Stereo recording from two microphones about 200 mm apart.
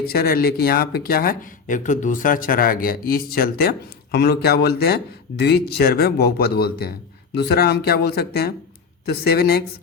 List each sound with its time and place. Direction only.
0.1 s speech: 50° left (ahead or behind)